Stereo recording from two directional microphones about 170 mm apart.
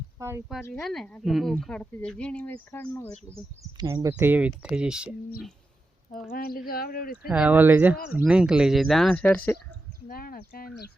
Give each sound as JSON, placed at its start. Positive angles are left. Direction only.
{"t": 0.2, "sound": "speech", "side_deg": -15}
{"t": 0.7, "sound": "a woman's voice", "side_deg": 0}
{"t": 3.6, "sound": "speech", "side_deg": -20}
{"t": 4.1, "sound": "a woman's voice", "side_deg": -10}
{"t": 6.3, "sound": "speech", "side_deg": 60}
{"t": 7.3, "sound": "a woman's voice", "side_deg": -5}
{"t": 10.1, "sound": "speech", "side_deg": 60}